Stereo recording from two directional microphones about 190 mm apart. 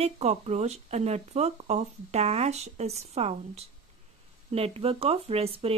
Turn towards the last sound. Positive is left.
turn(degrees=-30)  # may be behind; listen again after turning